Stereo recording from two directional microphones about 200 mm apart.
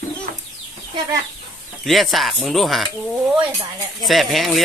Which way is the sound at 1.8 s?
Centre (ahead or behind).